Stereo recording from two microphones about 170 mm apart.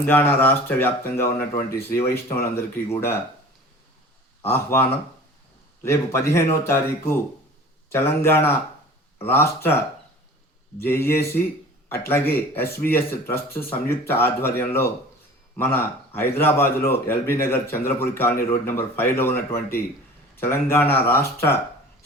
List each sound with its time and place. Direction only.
0.0 s speech: 10° left (ahead or behind)
4.4 s speech: 15° left (ahead or behind)
10.8 s a man's voice: 15° left (ahead or behind)